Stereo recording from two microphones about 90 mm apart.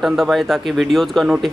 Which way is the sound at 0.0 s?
Centre (ahead or behind).